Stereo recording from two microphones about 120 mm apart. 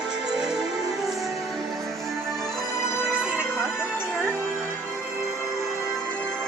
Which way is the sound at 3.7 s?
20° left (ahead or behind).